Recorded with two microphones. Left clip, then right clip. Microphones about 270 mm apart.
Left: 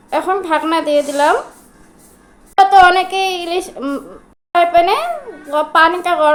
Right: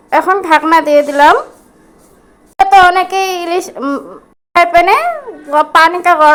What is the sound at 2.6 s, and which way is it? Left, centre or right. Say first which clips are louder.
A woman's voice: right 3 dB; centre.